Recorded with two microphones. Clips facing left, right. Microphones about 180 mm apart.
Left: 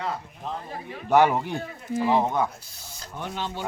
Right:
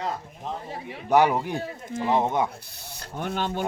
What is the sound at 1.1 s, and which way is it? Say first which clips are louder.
A man's voice: even; 15° right (ahead or behind).